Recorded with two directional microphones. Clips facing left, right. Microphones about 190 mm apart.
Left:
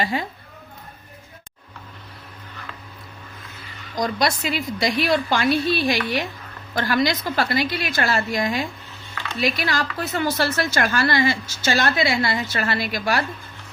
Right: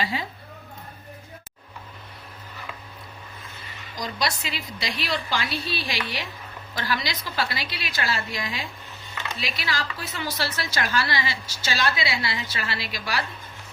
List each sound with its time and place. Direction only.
0.0 s a woman's voice: 50° left (ahead or behind)
3.9 s a woman's voice: 50° left (ahead or behind)